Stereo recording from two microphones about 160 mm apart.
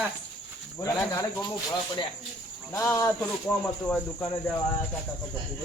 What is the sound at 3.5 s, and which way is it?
Speech, 5° left (ahead or behind).